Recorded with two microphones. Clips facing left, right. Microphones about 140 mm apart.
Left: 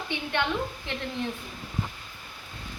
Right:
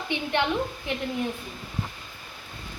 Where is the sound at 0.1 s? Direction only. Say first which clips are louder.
Right 3 dB; 15° right (ahead or behind).